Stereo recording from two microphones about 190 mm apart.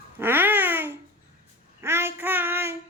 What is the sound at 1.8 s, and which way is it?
Child singing, 10° right (ahead or behind).